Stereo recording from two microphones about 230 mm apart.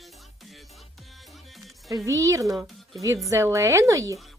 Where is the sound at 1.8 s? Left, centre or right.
Centre.